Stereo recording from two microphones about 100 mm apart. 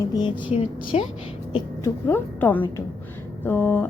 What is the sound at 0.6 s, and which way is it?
Speech, 75° left (ahead or behind).